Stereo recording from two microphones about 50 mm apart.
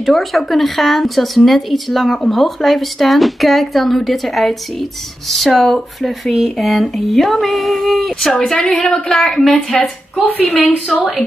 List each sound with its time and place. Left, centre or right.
0.0 s a woman's voice: centre
10.2 s a woman's voice: left